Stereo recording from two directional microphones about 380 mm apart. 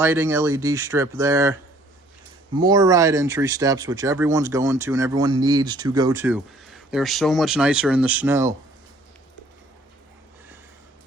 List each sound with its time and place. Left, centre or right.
0.0 s speech: centre
2.6 s speech: centre